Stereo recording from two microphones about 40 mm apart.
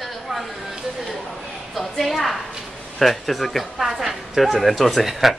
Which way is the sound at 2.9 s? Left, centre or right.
Centre.